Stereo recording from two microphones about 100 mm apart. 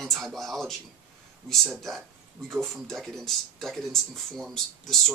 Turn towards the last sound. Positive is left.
turn(degrees=5)  # may be behind; listen again after turning